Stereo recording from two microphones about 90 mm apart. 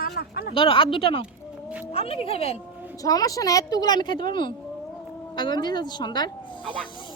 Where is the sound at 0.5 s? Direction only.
70° left (ahead or behind); by 2.4 s 90° left.